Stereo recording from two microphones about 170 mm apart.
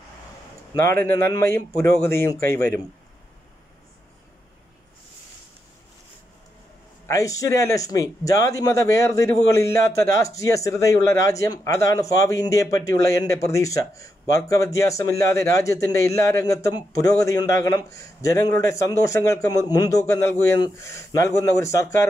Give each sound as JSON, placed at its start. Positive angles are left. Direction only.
{"t": 0.7, "sound": "a man's voice", "side_deg": 15}
{"t": 7.1, "sound": "a man's voice", "side_deg": 20}